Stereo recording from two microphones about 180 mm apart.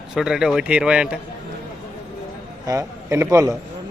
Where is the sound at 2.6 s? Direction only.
15° right (ahead or behind).